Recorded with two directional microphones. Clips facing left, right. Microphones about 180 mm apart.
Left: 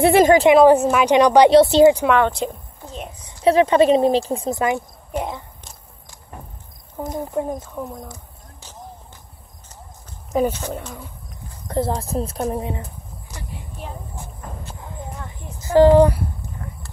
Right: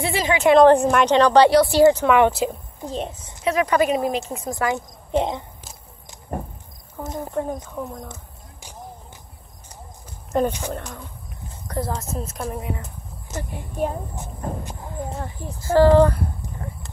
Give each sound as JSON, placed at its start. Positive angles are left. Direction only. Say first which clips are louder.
{"t": 0.0, "sound": "a woman's voice", "louder": "left 10 dB", "side_deg": 55}
{"t": 0.5, "sound": "a woman's voice", "louder": "left 1 dB", "side_deg": 5}
{"t": 2.1, "sound": "speech", "louder": "right 2 dB", "side_deg": -10}
{"t": 2.9, "sound": "a child's voice", "louder": "right 6 dB", "side_deg": -30}
{"t": 3.4, "sound": "speech", "louder": "left 6 dB", "side_deg": 25}
{"t": 4.7, "sound": "speech", "louder": "right 4 dB", "side_deg": -20}
{"t": 7.0, "sound": "a woman's voice", "louder": "left 2 dB", "side_deg": 15}
{"t": 7.7, "sound": "speech", "louder": "left 1 dB", "side_deg": 0}
{"t": 10.3, "sound": "a woman's voice", "louder": "left 1 dB", "side_deg": 5}
{"t": 11.6, "sound": "speech", "louder": "left 5 dB", "side_deg": 25}
{"t": 13.4, "sound": "a woman's voice", "louder": "right 11 dB", "side_deg": -50}
{"t": 15.0, "sound": "a sound", "louder": "right 4 dB", "side_deg": -30}
{"t": 15.6, "sound": "a woman's voice", "louder": "left 2 dB", "side_deg": 20}